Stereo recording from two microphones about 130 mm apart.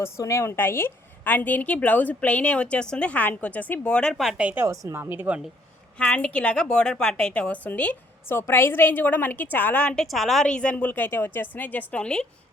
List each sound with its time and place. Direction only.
0.0 s a woman's voice: 25° left (ahead or behind); by 4.6 s 10° right (ahead or behind)
4.6 s speech: 25° right (ahead or behind)
6.0 s a woman's voice: 5° left (ahead or behind)